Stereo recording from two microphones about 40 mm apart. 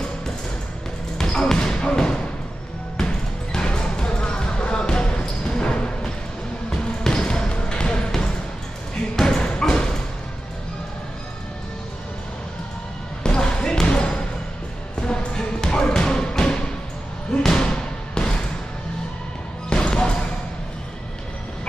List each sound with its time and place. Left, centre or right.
1.1 s basketball bounce: centre
9.1 s a sound: centre
13.2 s basketball bounce: left
15.0 s music: centre
17.5 s basketball bounce: left
19.7 s basketball bounce: left